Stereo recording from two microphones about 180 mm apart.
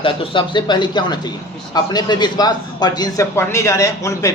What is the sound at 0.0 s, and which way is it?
A man's voice, 30° left (ahead or behind).